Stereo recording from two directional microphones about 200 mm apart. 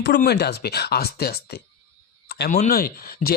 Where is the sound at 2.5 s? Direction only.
40° left (ahead or behind).